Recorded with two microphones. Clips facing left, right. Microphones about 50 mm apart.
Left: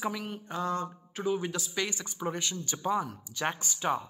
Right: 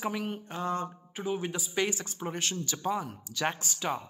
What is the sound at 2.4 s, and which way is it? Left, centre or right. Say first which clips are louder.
Speech: right 2 dB; right.